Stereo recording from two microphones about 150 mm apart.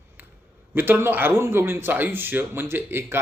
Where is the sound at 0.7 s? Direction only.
15° right (ahead or behind).